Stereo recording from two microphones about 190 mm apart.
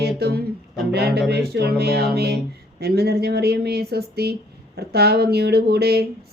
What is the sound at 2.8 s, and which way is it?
Speech, 55° right (ahead or behind).